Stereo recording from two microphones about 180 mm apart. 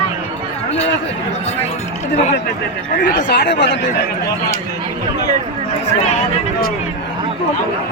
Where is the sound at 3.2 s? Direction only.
70° left (ahead or behind).